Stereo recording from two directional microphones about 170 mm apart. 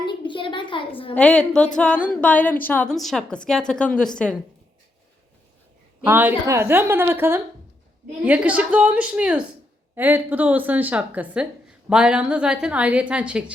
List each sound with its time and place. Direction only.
0.0 s a sound: 30° left (ahead or behind)
1.1 s a woman's voice: 10° left (ahead or behind)
6.1 s speech: 15° right (ahead or behind)